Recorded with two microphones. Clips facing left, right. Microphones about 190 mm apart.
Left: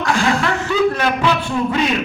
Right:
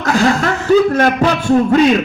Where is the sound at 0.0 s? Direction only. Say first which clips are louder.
Right 4 dB; 40° right (ahead or behind).